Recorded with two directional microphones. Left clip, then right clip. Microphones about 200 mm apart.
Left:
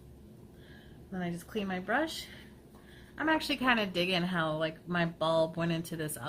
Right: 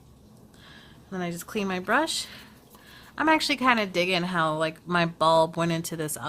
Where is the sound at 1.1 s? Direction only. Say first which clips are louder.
Right 7 dB; 50° right (ahead or behind).